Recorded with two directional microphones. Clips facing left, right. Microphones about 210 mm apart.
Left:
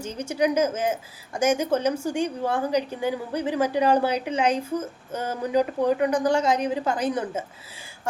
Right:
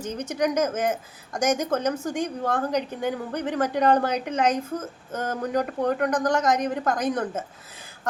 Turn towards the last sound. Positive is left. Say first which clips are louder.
# even
turn(degrees=10)  # may be behind; listen again after turning